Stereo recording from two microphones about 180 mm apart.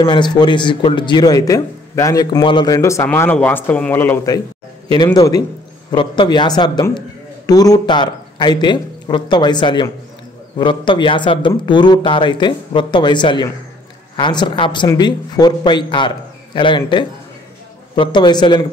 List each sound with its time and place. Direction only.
0.0 s speech: 25° left (ahead or behind)